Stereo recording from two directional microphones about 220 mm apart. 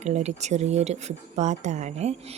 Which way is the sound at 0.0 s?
30° right (ahead or behind).